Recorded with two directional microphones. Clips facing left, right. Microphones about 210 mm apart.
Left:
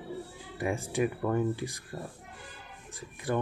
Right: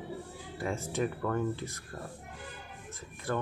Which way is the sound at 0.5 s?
15° left (ahead or behind).